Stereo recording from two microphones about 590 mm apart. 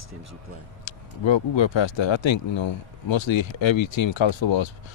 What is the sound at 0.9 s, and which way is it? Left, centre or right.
Speech, left.